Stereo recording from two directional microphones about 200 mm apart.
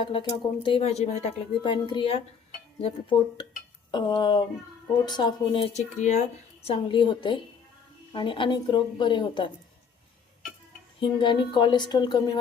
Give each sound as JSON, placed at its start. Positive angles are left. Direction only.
{"t": 0.0, "sound": "speech", "side_deg": 25}
{"t": 6.7, "sound": "speech", "side_deg": 25}
{"t": 11.0, "sound": "speech", "side_deg": 25}